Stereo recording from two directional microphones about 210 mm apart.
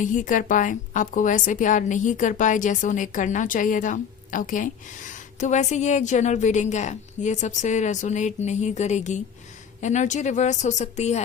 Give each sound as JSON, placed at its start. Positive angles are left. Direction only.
{"t": 0.0, "sound": "a woman's voice", "side_deg": 35}